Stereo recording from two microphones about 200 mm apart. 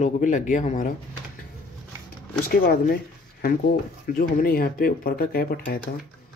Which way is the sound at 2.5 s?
50° left (ahead or behind).